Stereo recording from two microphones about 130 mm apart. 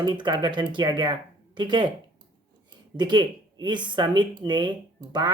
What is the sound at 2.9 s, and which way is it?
Speech, 35° right (ahead or behind).